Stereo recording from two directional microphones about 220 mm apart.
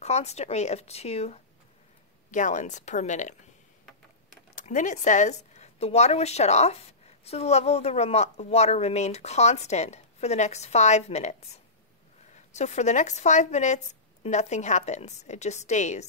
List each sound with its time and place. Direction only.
0.0 s a woman's voice: 30° left (ahead or behind)
4.6 s a woman's voice: 35° left (ahead or behind)
12.4 s a woman's voice: 30° left (ahead or behind)